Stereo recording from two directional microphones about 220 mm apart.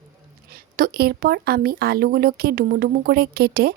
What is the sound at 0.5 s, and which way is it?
Speech, 45° right (ahead or behind).